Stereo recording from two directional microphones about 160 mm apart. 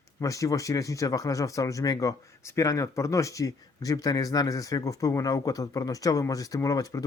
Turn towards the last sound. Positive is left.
turn(degrees=25)  # may be behind; listen again after turning